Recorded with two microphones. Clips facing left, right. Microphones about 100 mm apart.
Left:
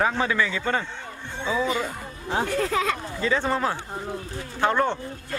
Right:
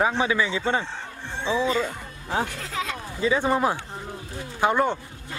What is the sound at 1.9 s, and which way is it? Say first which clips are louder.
Speech: left 1 dB; 5° right (ahead or behind).